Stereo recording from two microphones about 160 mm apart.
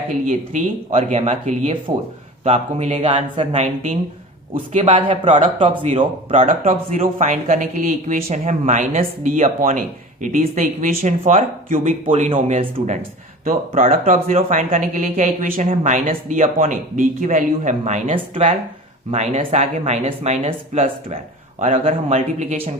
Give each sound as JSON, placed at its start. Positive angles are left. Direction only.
{"t": 0.3, "sound": "a man's voice", "side_deg": -50}
{"t": 5.5, "sound": "speech", "side_deg": -30}
{"t": 6.3, "sound": "a man's voice", "side_deg": -55}
{"t": 13.0, "sound": "speech", "side_deg": -60}
{"t": 17.2, "sound": "a man's voice", "side_deg": -45}
{"t": 21.6, "sound": "a man's voice", "side_deg": -45}